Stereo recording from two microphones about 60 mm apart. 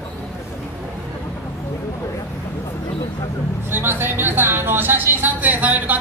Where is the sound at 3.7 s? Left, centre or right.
Right.